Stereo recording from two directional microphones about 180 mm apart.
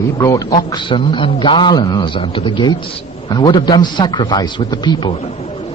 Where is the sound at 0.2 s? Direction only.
20° left (ahead or behind).